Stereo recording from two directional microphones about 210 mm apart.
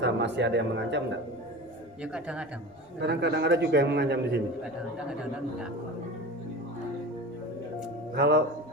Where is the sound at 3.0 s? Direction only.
55° right (ahead or behind).